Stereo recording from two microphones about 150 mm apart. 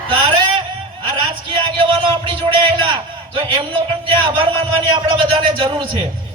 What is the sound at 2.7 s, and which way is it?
A man's voice, 30° right (ahead or behind).